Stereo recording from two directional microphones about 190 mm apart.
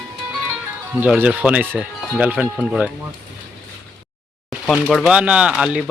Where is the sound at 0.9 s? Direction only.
10° right (ahead or behind).